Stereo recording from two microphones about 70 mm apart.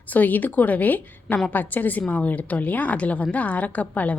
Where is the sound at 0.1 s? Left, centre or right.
Left.